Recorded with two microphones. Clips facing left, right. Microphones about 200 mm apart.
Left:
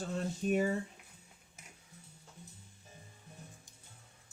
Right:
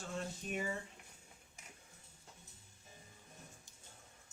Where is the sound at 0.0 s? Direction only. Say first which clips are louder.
Left 8 dB; 35° left (ahead or behind).